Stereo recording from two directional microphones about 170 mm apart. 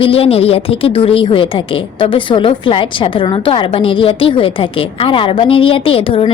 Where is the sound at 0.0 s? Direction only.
35° left (ahead or behind).